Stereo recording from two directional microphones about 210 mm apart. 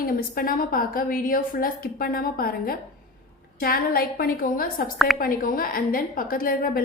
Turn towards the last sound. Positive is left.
turn(degrees=45)  # may be behind; listen again after turning